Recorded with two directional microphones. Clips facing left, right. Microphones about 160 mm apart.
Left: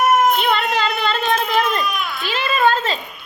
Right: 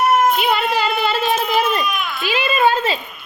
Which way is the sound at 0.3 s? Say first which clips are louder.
Right 1 dB; 5° right (ahead or behind).